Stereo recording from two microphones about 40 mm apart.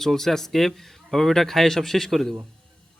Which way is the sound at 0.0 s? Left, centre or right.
Centre.